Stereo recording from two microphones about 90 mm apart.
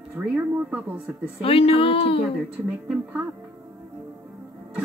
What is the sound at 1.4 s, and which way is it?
Speech, 90° left.